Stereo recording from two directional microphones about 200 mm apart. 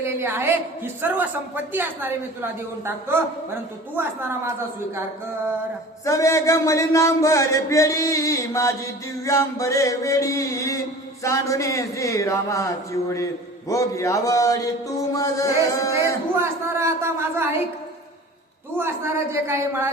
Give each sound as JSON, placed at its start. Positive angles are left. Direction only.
{"t": 0.0, "sound": "a woman's voice", "side_deg": -10}
{"t": 6.1, "sound": "a man's voice", "side_deg": 15}
{"t": 16.4, "sound": "a woman's voice", "side_deg": -15}
{"t": 18.8, "sound": "a woman's voice", "side_deg": -10}